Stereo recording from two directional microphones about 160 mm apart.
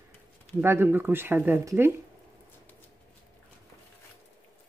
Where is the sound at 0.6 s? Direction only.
15° right (ahead or behind).